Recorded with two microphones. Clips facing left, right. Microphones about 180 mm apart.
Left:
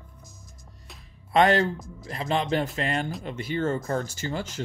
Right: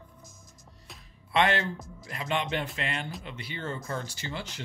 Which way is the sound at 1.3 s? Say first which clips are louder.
Left 6 dB; 40° left (ahead or behind).